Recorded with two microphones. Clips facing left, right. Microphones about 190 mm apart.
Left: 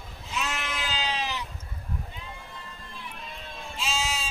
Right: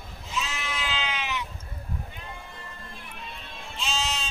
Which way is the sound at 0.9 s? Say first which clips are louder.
Left 2 dB; 35° left (ahead or behind).